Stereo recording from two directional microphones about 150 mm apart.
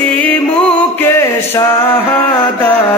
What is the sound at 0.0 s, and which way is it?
Music, 10° left (ahead or behind).